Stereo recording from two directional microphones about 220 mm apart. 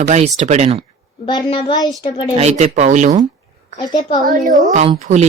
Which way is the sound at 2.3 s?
30° right (ahead or behind).